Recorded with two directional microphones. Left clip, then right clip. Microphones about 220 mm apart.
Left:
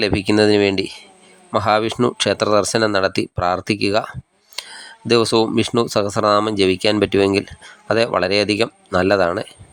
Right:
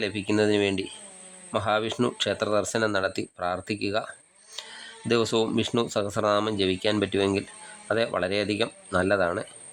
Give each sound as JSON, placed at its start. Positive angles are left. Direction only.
{"t": 0.0, "sound": "speech", "side_deg": 25}